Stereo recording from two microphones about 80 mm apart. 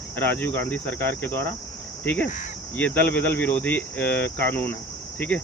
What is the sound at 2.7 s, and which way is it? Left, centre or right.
Speech, left.